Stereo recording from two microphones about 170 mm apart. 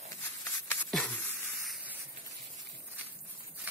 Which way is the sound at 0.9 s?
5° left (ahead or behind).